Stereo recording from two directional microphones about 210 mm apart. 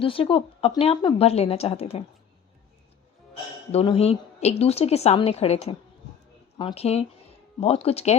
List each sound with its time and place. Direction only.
0.0 s speech: 25° left (ahead or behind)
3.7 s speech: 30° left (ahead or behind)